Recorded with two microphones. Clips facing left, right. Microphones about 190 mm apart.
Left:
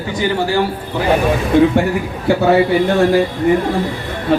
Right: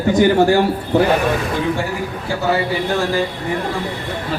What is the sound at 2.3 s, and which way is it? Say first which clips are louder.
Speech: left 11 dB; 65° left (ahead or behind).